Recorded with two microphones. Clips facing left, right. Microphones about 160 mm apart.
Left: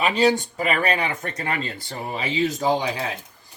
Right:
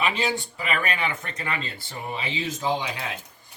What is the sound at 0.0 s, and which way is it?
Speech, 40° left (ahead or behind).